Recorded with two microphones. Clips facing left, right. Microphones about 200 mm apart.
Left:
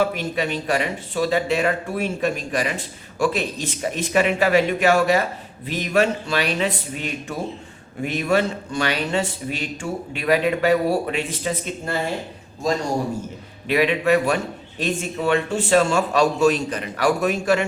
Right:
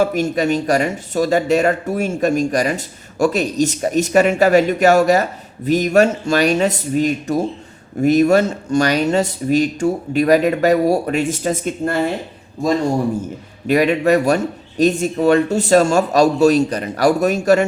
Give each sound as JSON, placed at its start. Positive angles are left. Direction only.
{"t": 0.0, "sound": "speech", "side_deg": -45}
{"t": 13.7, "sound": "a man's voice", "side_deg": -45}